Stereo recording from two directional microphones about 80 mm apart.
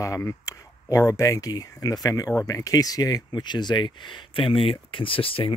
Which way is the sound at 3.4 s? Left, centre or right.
Left.